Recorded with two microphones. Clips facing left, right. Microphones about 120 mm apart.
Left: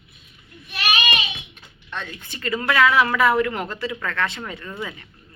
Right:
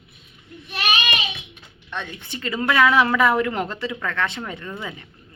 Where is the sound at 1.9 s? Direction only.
20° right (ahead or behind).